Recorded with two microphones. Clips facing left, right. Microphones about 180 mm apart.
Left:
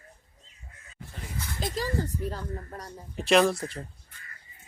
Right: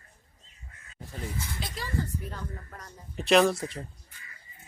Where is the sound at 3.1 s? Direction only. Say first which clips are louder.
Even; centre (ahead or behind).